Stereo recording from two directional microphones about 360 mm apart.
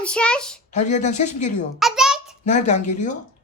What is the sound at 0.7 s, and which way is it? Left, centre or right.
Speech, centre.